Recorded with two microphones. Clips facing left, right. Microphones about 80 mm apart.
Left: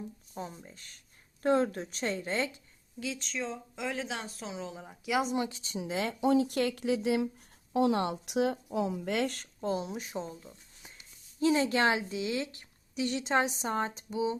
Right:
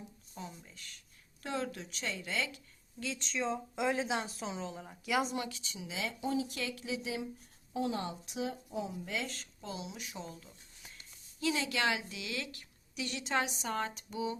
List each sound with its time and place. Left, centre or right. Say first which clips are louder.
0.3 s speech: left 5 dB; left
3.0 s a woman's voice: even; centre
3.8 s a woman's voice: right 3 dB; centre
5.3 s speech: left 6 dB; left
5.8 s speech: left 8 dB; left
7.7 s a woman's voice: left 8 dB; left